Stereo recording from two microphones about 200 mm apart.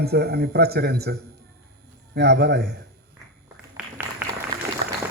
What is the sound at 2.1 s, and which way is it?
Speech, 60° right (ahead or behind).